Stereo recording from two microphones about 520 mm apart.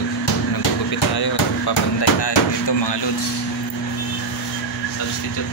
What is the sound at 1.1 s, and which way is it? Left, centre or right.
Speech, left.